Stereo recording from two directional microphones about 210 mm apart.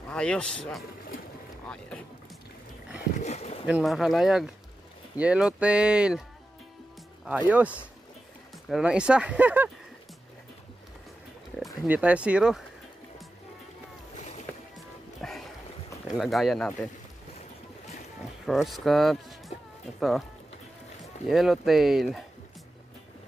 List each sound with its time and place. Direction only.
0.1 s speech: 5° left (ahead or behind)
3.2 s speech: 30° left (ahead or behind)
3.6 s speech: 5° right (ahead or behind)
7.2 s speech: 5° right (ahead or behind)
11.8 s speech: 5° right (ahead or behind)
14.1 s boat: 30° left (ahead or behind)
15.2 s music: centre (ahead or behind)
16.2 s speech: centre (ahead or behind)
18.5 s speech: centre (ahead or behind)
21.3 s speech: centre (ahead or behind)